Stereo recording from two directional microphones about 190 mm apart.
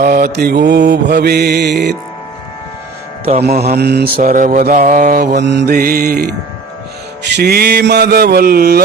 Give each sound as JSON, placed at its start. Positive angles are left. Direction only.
{"t": 0.0, "sound": "mantra", "side_deg": -50}
{"t": 3.4, "sound": "mantra", "side_deg": -55}
{"t": 7.3, "sound": "mantra", "side_deg": -55}